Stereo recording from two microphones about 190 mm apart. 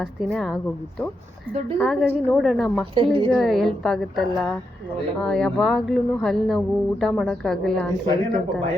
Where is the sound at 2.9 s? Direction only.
25° right (ahead or behind).